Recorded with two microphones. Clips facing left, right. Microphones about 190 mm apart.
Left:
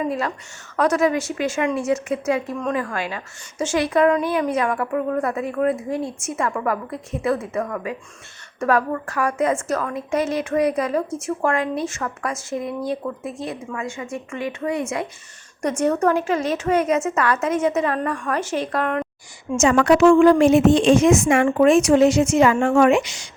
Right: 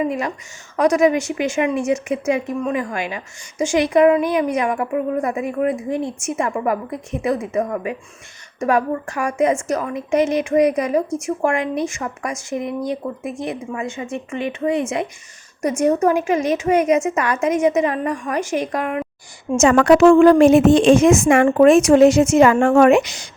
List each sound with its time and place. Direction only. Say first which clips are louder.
0.0 s a woman's voice: right 2 dB; 15° right (ahead or behind)
15.8 s a woman's voice: right 3 dB; 10° right (ahead or behind)
19.5 s a woman's voice: right 3 dB; 50° right (ahead or behind)